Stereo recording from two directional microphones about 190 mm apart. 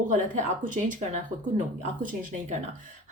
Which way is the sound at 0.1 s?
45° right (ahead or behind).